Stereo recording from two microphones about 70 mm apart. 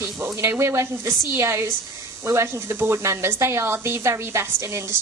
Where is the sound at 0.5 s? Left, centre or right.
Right.